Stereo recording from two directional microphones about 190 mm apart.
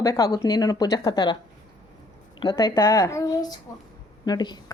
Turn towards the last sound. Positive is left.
turn(degrees=20)  # may be behind; listen again after turning